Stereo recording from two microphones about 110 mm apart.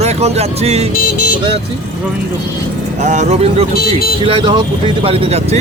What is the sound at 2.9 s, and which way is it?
Speech, 90° right.